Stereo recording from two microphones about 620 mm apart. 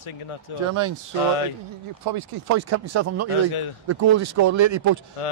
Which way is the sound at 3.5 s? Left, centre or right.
Left.